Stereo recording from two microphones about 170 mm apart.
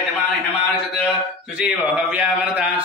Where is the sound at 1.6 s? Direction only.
10° right (ahead or behind).